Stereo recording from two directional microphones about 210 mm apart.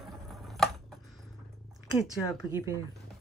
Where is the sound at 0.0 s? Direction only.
Centre (ahead or behind).